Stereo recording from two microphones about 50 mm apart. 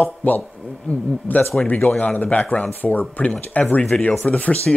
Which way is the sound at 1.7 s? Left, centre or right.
Left.